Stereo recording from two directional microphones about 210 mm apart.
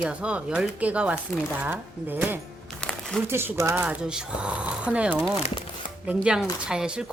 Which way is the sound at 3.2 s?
10° right (ahead or behind).